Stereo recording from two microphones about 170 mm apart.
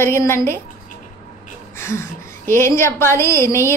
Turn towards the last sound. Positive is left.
turn(degrees=15)  # may be behind; listen again after turning